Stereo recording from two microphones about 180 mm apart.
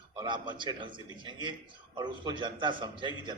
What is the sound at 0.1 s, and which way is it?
A man's voice, 25° right (ahead or behind).